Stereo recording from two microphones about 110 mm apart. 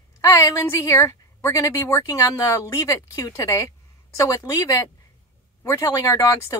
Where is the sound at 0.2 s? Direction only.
25° left (ahead or behind).